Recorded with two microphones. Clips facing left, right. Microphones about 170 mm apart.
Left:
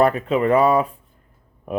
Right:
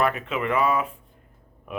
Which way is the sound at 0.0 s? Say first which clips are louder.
Left 7 dB; 35° left (ahead or behind).